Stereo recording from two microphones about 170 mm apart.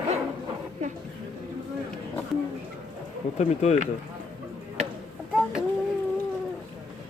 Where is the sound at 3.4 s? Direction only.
40° left (ahead or behind).